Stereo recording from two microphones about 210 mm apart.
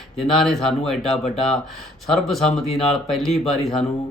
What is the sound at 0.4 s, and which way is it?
Speech, centre (ahead or behind).